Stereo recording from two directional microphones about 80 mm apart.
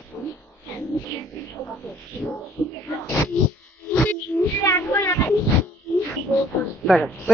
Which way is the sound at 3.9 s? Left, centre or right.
Left.